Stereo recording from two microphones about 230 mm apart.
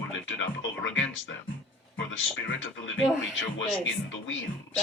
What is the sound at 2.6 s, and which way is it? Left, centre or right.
Speech, left.